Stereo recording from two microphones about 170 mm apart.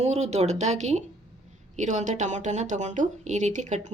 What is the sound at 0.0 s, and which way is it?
A woman's voice, 40° right (ahead or behind).